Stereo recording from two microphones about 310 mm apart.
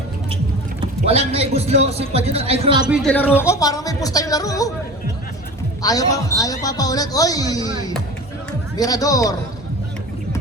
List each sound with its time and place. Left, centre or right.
1.0 s a man's voice: centre
2.8 s a man's voice: centre
5.8 s a man's voice: centre